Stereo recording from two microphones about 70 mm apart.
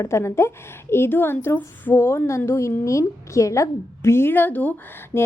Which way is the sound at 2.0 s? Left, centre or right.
Left.